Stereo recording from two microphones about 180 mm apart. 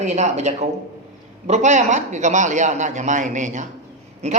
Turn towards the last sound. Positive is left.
turn(degrees=-35)  # may be behind; listen again after turning